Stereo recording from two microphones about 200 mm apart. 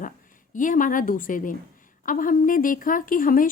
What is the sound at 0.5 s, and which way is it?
A woman's voice, 40° left (ahead or behind).